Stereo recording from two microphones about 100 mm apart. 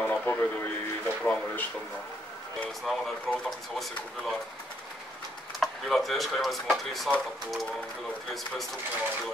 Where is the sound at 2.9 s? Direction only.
Centre (ahead or behind).